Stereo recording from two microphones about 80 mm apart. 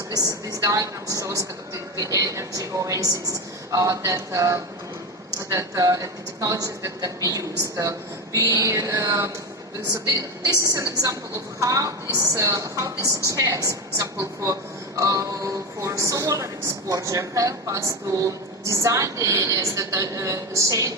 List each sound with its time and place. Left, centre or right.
0.1 s a woman's voice: right